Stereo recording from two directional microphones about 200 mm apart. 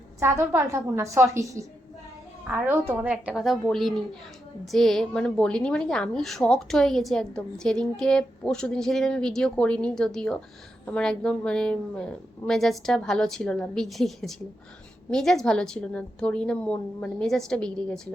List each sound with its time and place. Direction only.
0.2 s a woman's voice: 15° right (ahead or behind); by 18.1 s 5° left (ahead or behind)